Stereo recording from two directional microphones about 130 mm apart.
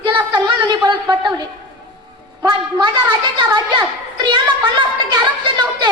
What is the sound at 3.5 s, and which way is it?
A woman's voice, 35° right (ahead or behind).